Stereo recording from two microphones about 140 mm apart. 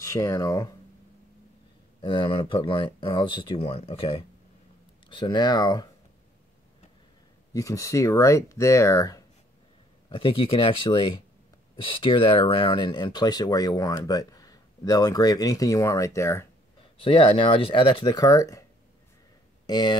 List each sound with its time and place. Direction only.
0.0 s speech: 20° left (ahead or behind)
2.0 s speech: 40° left (ahead or behind)
5.1 s speech: 35° left (ahead or behind)
7.5 s speech: 25° left (ahead or behind)
10.0 s speech: 40° left (ahead or behind); by 16.4 s 20° left (ahead or behind)
17.0 s speech: 40° left (ahead or behind); by 18.6 s 25° left (ahead or behind)
19.6 s speech: 30° left (ahead or behind)